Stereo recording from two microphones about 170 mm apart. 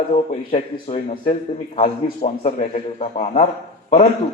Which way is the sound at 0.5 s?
35° left (ahead or behind).